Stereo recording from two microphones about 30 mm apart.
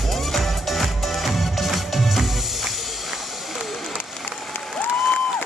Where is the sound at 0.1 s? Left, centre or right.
Centre.